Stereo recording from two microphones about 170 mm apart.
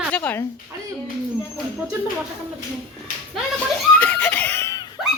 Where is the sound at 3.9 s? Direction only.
10° left (ahead or behind).